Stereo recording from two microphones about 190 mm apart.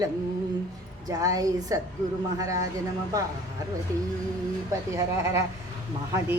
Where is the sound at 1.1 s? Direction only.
20° right (ahead or behind).